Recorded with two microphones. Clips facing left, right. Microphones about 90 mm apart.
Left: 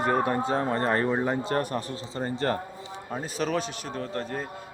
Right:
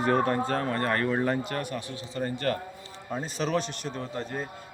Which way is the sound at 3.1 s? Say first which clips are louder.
Even; 5° left (ahead or behind).